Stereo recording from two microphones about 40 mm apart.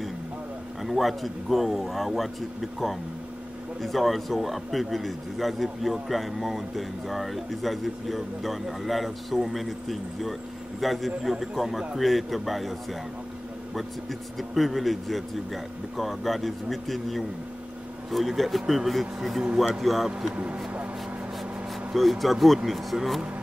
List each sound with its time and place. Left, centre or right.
0.8 s a man's voice: centre
14.5 s speech: centre
19.4 s speech: centre
19.7 s speech: centre
20.3 s speech: right
21.9 s speech: centre